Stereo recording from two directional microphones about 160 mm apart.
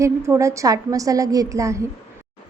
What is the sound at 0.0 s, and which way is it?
A woman's voice, 20° right (ahead or behind).